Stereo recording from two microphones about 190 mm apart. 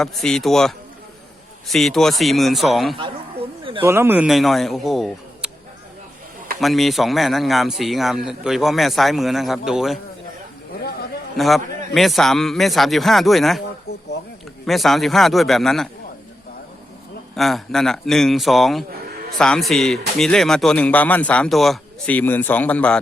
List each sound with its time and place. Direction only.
0.0 s speech: centre (ahead or behind)
3.6 s a sound: 30° right (ahead or behind)
3.8 s speech: 10° right (ahead or behind)
6.6 s speech: centre (ahead or behind)
11.3 s speech: centre (ahead or behind)
14.7 s speech: centre (ahead or behind)
17.3 s speech: centre (ahead or behind)